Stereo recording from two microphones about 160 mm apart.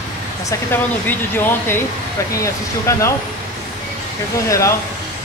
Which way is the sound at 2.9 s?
20° left (ahead or behind).